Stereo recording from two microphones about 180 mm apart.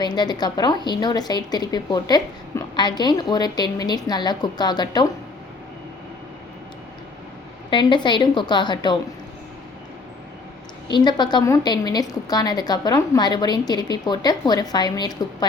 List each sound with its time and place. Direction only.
0.0 s a woman's voice: 25° left (ahead or behind)
7.7 s a woman's voice: 25° left (ahead or behind)
10.9 s a woman's voice: 25° left (ahead or behind)